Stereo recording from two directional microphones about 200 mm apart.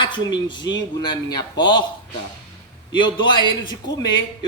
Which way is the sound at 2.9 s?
25° left (ahead or behind).